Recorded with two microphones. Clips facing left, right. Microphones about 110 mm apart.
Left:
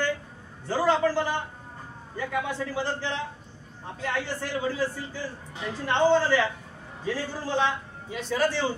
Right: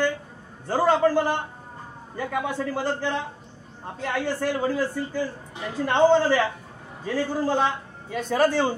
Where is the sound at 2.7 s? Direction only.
50° right (ahead or behind).